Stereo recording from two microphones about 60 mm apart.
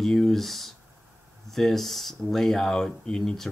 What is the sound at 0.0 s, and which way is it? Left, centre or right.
Speech, centre.